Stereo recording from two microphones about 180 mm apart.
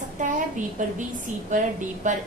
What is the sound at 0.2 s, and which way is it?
A woman's voice, 45° right (ahead or behind).